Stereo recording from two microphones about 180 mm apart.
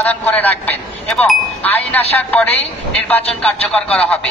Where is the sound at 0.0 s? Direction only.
10° left (ahead or behind).